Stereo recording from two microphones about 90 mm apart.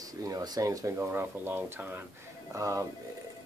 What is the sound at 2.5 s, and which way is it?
Speech, 35° right (ahead or behind).